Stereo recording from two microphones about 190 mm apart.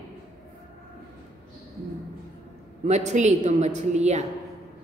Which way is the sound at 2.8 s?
35° right (ahead or behind).